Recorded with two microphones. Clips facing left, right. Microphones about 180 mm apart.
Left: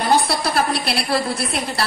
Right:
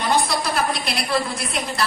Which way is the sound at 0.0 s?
35° left (ahead or behind).